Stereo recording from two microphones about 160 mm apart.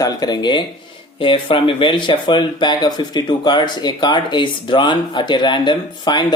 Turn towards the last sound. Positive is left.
turn(degrees=25)  # may be behind; listen again after turning